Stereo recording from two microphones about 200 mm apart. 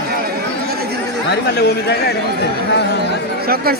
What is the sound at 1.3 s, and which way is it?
Speech, 55° left (ahead or behind).